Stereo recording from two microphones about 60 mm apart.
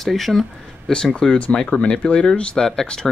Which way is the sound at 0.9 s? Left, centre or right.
Centre.